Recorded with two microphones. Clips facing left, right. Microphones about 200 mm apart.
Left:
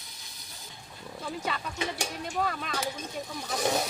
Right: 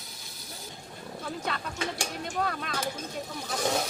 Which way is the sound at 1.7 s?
20° left (ahead or behind).